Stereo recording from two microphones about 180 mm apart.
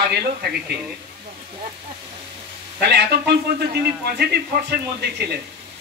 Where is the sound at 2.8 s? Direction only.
65° right (ahead or behind).